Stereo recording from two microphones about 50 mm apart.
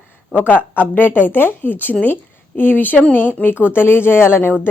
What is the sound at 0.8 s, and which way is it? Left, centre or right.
Speech, left.